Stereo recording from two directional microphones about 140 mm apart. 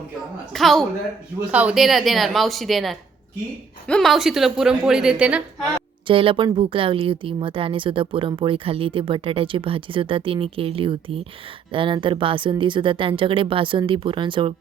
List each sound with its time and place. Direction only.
0.5 s speech: centre (ahead or behind)
1.5 s speech: 10° right (ahead or behind)
6.1 s a woman's voice: 40° right (ahead or behind)